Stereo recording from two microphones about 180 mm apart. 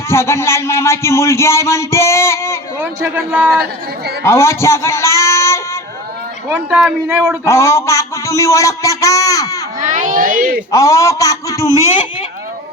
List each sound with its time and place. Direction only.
0.1 s a man's voice: 15° left (ahead or behind)
2.7 s a man's voice: 10° right (ahead or behind)
4.2 s speech: 15° left (ahead or behind)
6.5 s a man's voice: 10° right (ahead or behind)
7.4 s a sound: 15° left (ahead or behind)
9.8 s a sound: 45° right (ahead or behind)
10.7 s a man's voice: 20° left (ahead or behind)